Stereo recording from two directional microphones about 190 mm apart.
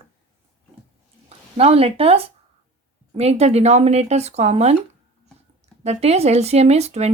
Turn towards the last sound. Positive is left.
turn(degrees=-35)  # may be behind; listen again after turning